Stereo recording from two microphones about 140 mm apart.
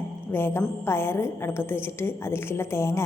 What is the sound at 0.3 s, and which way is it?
A woman's voice, 20° left (ahead or behind).